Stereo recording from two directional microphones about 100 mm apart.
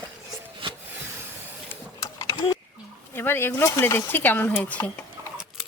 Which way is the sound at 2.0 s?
35° left (ahead or behind).